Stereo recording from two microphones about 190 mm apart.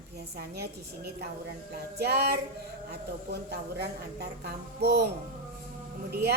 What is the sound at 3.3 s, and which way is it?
A woman's voice, 60° right (ahead or behind).